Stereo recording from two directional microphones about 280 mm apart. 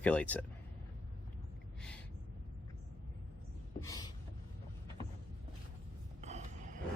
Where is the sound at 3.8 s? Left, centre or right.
Centre.